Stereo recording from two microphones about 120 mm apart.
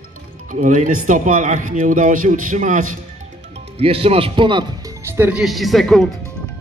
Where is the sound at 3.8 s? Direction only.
55° right (ahead or behind).